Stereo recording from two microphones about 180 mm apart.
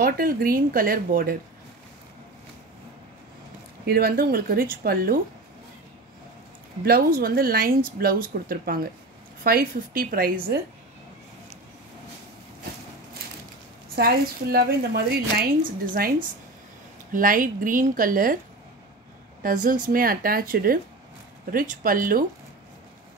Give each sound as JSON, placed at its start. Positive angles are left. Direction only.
{"t": 0.0, "sound": "speech", "side_deg": -55}
{"t": 3.8, "sound": "speech", "side_deg": -60}
{"t": 6.8, "sound": "speech", "side_deg": -60}
{"t": 13.9, "sound": "speech", "side_deg": -60}
{"t": 15.9, "sound": "speech", "side_deg": -50}
{"t": 19.4, "sound": "speech", "side_deg": -50}